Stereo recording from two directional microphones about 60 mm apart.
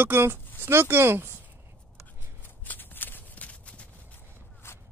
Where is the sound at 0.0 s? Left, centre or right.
Right.